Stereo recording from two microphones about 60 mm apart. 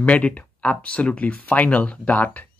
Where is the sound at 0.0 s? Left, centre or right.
Left.